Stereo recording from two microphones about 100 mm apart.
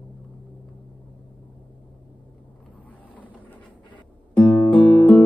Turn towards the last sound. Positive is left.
turn(degrees=5)  # may be behind; listen again after turning